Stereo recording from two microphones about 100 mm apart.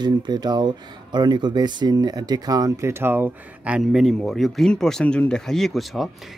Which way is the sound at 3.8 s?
Centre (ahead or behind).